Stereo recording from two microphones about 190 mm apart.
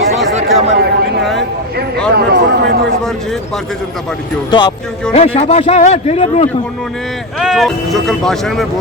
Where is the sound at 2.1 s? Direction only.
55° right (ahead or behind).